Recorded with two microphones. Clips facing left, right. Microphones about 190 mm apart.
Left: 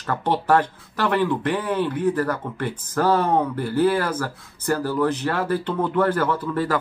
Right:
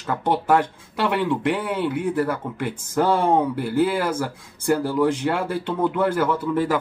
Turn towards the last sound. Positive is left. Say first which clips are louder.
# right 2 dB
turn(degrees=-10)  # may be behind; listen again after turning